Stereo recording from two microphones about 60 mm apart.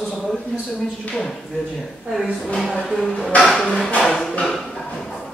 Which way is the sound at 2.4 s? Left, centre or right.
Centre.